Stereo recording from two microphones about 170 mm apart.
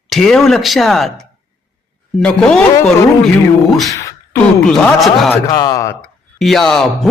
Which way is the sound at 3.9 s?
15° left (ahead or behind).